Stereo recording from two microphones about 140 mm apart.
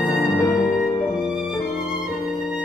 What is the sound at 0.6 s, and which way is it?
Music, 5° right (ahead or behind).